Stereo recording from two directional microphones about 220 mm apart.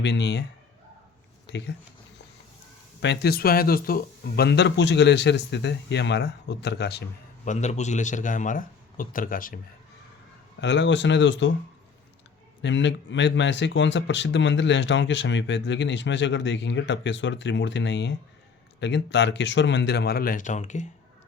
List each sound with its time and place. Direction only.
0.0 s speech: 50° left (ahead or behind)
1.5 s speech: 50° left (ahead or behind)
3.0 s speech: 50° left (ahead or behind)
7.4 s a man's voice: 30° left (ahead or behind)
10.6 s speech: 55° left (ahead or behind)
12.6 s speech: 55° left (ahead or behind); by 20.8 s 35° left (ahead or behind)